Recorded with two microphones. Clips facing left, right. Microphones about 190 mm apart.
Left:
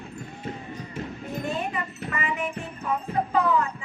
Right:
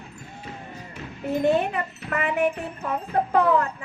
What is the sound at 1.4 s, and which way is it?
Speech, 65° right (ahead or behind).